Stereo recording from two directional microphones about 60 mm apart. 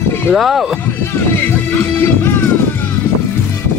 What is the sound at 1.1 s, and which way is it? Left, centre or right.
Music, left.